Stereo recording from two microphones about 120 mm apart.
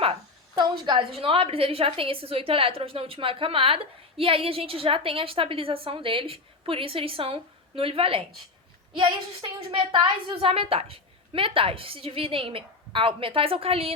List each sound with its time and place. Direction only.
0.0 s a woman's voice: 45° right (ahead or behind)